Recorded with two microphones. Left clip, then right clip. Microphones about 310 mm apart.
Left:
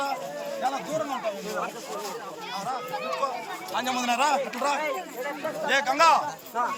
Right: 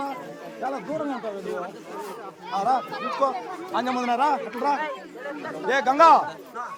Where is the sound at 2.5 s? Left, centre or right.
Right.